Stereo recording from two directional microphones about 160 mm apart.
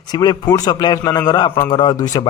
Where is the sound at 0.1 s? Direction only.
25° left (ahead or behind).